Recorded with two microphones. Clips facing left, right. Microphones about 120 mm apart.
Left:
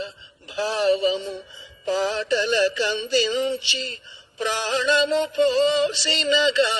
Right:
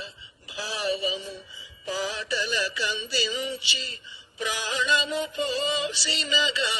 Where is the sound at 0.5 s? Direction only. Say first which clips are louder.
Left 9 dB; 80° left.